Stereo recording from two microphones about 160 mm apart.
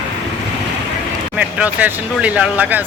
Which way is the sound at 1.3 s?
10° right (ahead or behind).